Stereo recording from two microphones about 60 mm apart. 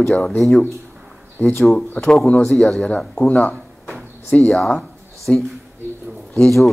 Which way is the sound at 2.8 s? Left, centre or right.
Centre.